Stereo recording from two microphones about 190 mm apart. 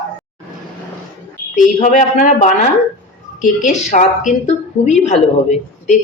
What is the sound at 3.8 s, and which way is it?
A woman's voice, 40° left (ahead or behind).